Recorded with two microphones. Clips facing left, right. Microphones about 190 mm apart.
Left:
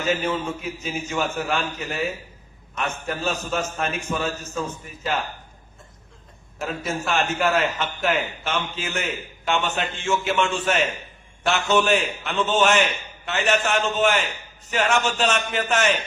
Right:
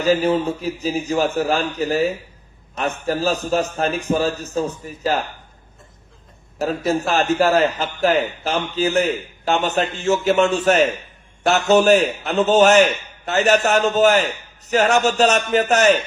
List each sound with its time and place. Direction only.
0.0 s a man's voice: 35° right (ahead or behind)
6.6 s a man's voice: 35° right (ahead or behind)